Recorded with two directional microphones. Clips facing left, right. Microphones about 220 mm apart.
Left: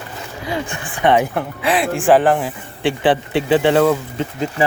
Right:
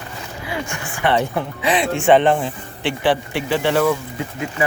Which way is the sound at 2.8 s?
20° left (ahead or behind).